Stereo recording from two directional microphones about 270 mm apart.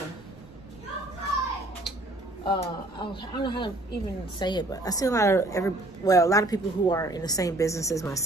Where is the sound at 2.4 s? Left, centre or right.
Centre.